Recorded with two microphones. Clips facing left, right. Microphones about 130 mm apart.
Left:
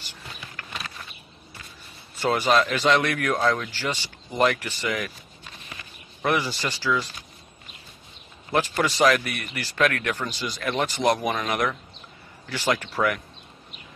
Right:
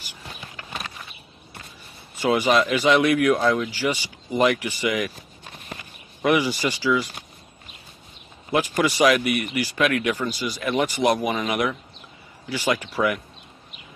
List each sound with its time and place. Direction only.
2.3 s speech: 10° right (ahead or behind)
6.2 s speech: 15° right (ahead or behind)
8.5 s speech: 10° right (ahead or behind)